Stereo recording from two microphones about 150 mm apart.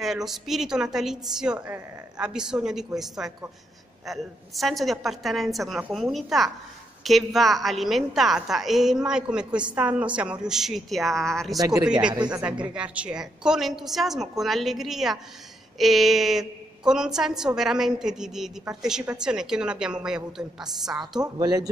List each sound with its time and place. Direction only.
0.0 s a woman's voice: centre (ahead or behind)
11.5 s speech: 25° right (ahead or behind)
12.4 s a woman's voice: 10° right (ahead or behind)
21.2 s speech: 25° right (ahead or behind)